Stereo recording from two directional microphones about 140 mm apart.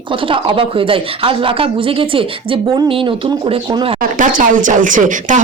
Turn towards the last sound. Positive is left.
turn(degrees=-65)  # may be behind; listen again after turning